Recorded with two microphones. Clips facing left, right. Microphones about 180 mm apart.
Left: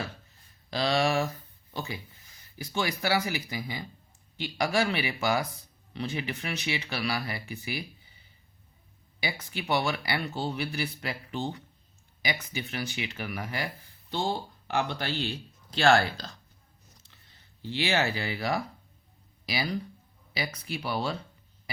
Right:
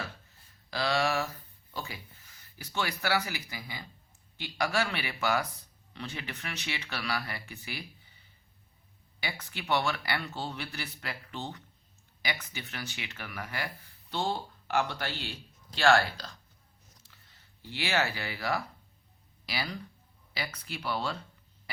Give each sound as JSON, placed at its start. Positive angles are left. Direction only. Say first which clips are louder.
{"t": 0.7, "sound": "a sound", "louder": "left 3 dB", "side_deg": 20}
{"t": 2.7, "sound": "speech", "louder": "left 3 dB", "side_deg": 15}
{"t": 9.2, "sound": "speech", "louder": "left 4 dB", "side_deg": 15}
{"t": 17.7, "sound": "speech", "louder": "left 3 dB", "side_deg": 20}